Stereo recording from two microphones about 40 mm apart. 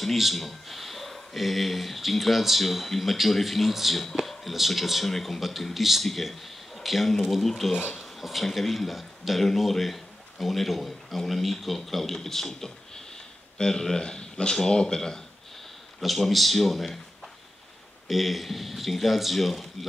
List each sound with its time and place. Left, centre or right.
0.0 s speech: centre
16.0 s speech: centre
18.0 s speech: centre